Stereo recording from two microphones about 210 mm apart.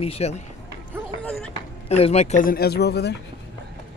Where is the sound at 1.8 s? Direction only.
30° left (ahead or behind); by 3.1 s 50° left (ahead or behind).